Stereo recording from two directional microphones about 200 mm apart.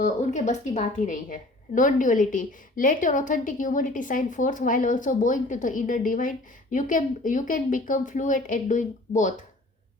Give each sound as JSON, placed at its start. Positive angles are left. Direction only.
{"t": 0.0, "sound": "a woman's voice", "side_deg": 35}